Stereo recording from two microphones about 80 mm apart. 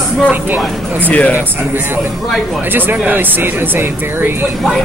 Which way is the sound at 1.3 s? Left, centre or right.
Right.